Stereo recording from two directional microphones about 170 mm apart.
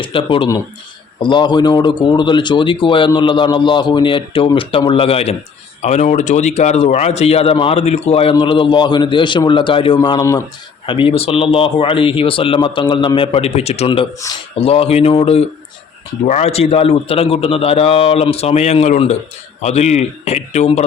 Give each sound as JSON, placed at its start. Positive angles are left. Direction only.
{"t": 0.0, "sound": "a man's voice", "side_deg": 30}